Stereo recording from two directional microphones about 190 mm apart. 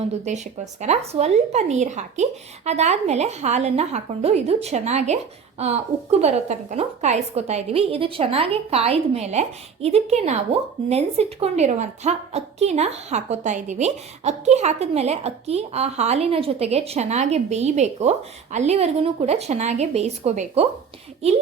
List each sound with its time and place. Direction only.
0.3 s a woman's voice: 35° right (ahead or behind)